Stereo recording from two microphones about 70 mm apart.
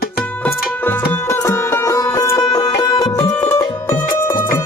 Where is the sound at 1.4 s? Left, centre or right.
Left.